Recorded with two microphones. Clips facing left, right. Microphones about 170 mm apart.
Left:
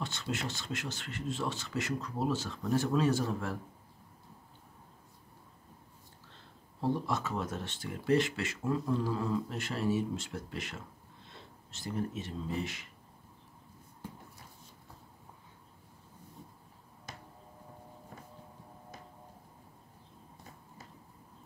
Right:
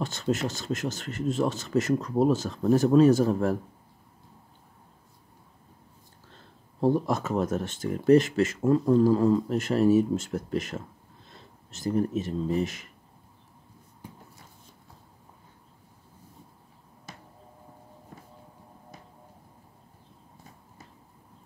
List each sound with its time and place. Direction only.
0.0 s speech: 40° right (ahead or behind)
6.8 s speech: 45° right (ahead or behind)